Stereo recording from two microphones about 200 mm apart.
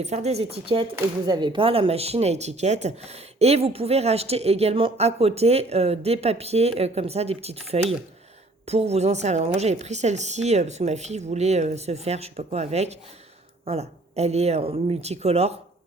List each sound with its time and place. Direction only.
0.0 s speech: 35° right (ahead or behind)